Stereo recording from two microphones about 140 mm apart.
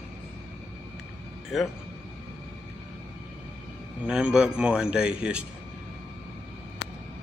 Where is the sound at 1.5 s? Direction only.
Centre (ahead or behind).